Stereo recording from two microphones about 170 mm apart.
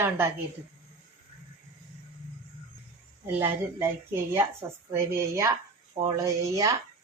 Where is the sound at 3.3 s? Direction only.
15° right (ahead or behind).